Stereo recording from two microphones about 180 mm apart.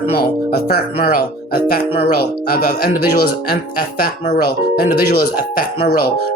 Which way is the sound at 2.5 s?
55° left (ahead or behind).